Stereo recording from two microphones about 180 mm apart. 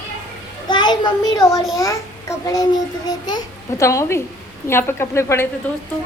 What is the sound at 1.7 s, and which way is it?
A child's voice, 15° left (ahead or behind).